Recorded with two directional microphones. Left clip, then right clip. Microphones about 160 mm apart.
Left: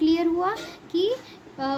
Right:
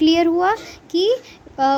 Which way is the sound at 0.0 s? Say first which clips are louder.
Right 7 dB; 55° right (ahead or behind).